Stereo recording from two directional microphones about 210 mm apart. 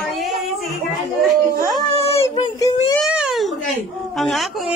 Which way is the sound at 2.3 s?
20° left (ahead or behind).